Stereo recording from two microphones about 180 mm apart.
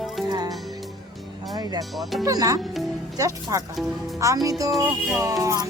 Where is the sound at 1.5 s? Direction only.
20° right (ahead or behind).